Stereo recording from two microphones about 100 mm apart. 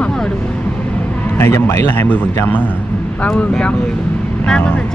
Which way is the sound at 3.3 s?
10° left (ahead or behind).